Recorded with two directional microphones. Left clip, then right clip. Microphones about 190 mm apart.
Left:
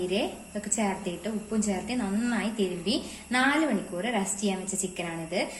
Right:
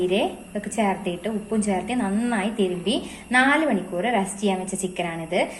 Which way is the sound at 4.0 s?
10° left (ahead or behind).